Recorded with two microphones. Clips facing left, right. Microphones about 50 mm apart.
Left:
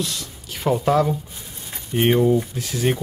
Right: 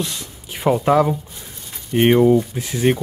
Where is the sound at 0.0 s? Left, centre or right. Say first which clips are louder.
Right 1 dB; right.